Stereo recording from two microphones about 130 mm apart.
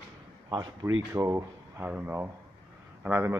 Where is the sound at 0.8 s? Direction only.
25° right (ahead or behind).